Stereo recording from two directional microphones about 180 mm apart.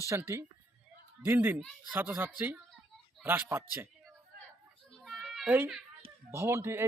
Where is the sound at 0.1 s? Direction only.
15° right (ahead or behind).